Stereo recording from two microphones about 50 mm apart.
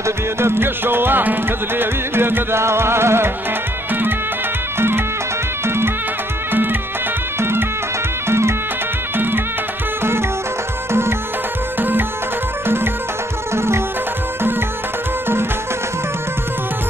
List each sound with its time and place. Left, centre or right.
0.0 s speech: right
4.7 s music: right
6.5 s music: right
7.3 s music: right
9.1 s music: right
10.9 s music: right
12.6 s music: right